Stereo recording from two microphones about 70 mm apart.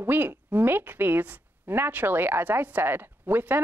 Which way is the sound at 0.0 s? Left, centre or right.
Right.